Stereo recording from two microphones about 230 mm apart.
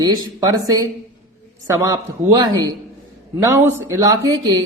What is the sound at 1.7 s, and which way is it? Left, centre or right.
Speech, centre.